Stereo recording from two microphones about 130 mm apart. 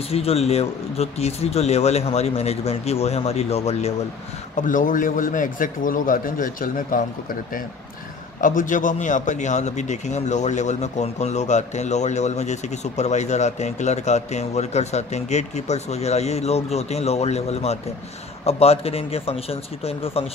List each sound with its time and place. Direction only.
0.1 s speech: 50° left (ahead or behind)
4.6 s a man's voice: 90° left; by 20.2 s 50° left (ahead or behind)